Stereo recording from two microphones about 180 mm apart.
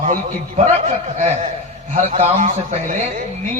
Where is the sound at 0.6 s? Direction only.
40° right (ahead or behind).